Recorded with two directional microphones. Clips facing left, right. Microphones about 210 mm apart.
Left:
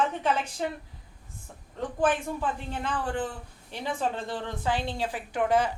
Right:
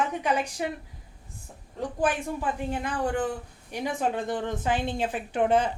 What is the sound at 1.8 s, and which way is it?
Speech, 10° right (ahead or behind).